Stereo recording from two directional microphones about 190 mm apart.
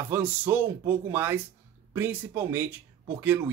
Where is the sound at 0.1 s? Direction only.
10° right (ahead or behind).